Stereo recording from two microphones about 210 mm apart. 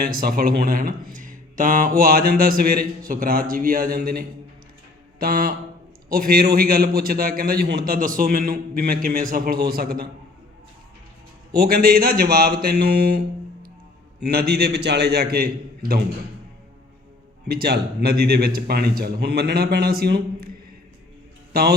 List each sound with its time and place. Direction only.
0.0 s a man's voice: 45° right (ahead or behind)
11.5 s a man's voice: 45° right (ahead or behind)
17.5 s a man's voice: 50° right (ahead or behind)